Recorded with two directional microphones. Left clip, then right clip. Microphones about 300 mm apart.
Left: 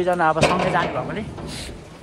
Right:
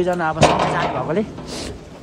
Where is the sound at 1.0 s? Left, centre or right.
Centre.